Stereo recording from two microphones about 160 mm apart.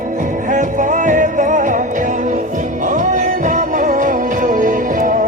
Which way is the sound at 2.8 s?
50° right (ahead or behind).